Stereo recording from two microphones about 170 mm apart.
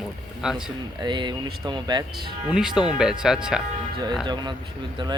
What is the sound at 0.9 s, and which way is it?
A man's voice, 25° right (ahead or behind).